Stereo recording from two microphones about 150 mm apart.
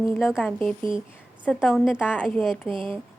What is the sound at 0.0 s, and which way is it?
A woman's voice, centre (ahead or behind).